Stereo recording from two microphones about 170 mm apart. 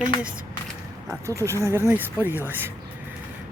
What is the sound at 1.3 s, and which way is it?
Speech, 15° right (ahead or behind).